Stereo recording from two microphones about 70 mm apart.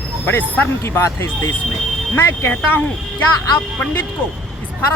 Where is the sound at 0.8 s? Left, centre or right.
Left.